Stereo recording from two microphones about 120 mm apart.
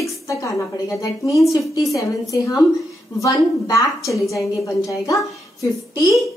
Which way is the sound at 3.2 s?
25° left (ahead or behind).